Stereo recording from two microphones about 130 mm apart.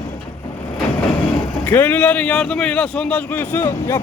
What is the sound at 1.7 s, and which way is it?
A man's voice, 15° left (ahead or behind).